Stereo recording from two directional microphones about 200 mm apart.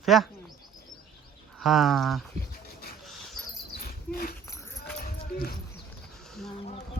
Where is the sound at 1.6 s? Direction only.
Centre (ahead or behind).